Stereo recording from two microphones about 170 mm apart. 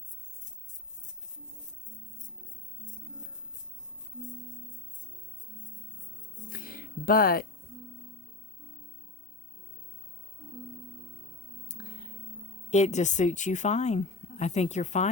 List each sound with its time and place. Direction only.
6.5 s music: 55° left (ahead or behind)
12.7 s speech: 40° left (ahead or behind)